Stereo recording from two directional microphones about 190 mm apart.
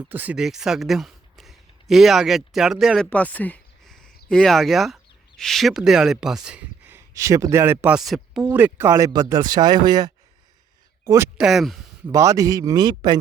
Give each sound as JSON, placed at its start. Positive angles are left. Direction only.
{"t": 0.0, "sound": "speech", "side_deg": -10}
{"t": 8.5, "sound": "speech", "side_deg": -10}
{"t": 11.3, "sound": "speech", "side_deg": 0}
{"t": 12.1, "sound": "speech", "side_deg": -15}